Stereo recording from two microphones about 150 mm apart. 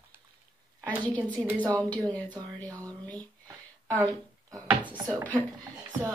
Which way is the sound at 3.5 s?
20° right (ahead or behind).